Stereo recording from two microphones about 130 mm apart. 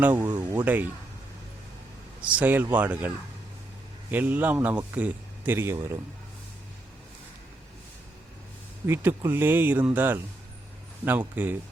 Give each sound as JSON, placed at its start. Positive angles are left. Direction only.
{"t": 0.0, "sound": "a man's voice", "side_deg": -15}
{"t": 0.3, "sound": "a sound", "side_deg": -35}
{"t": 0.6, "sound": "a man's voice", "side_deg": -15}
{"t": 2.2, "sound": "a man's voice", "side_deg": -10}
{"t": 4.1, "sound": "a man's voice", "side_deg": -15}
{"t": 8.9, "sound": "a man's voice", "side_deg": -20}